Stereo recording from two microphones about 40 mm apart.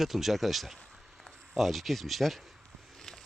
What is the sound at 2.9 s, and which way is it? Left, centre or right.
Walk, centre.